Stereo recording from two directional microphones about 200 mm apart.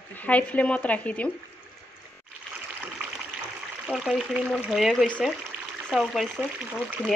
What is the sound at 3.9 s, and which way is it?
Speech, centre (ahead or behind).